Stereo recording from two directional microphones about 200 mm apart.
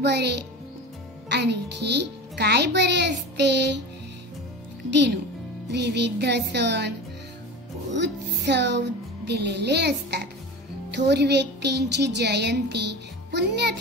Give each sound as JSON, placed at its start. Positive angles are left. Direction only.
{"t": 0.0, "sound": "a child's voice", "side_deg": -55}
{"t": 4.9, "sound": "a child's voice", "side_deg": -60}
{"t": 7.9, "sound": "a child's voice", "side_deg": -60}